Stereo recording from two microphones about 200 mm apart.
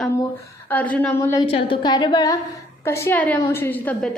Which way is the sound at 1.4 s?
25° left (ahead or behind).